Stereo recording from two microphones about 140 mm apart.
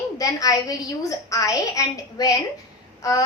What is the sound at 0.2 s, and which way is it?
A woman's voice, 25° left (ahead or behind).